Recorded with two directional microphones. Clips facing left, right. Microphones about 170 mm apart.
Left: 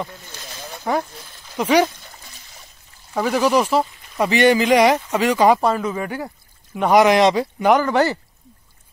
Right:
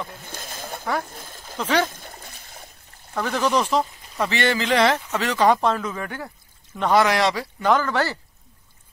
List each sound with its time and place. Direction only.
0.1 s a sound: 50° right (ahead or behind)
1.6 s a man's voice: 10° left (ahead or behind)
1.9 s splash: 50° right (ahead or behind)
3.2 s a man's voice: 10° left (ahead or behind)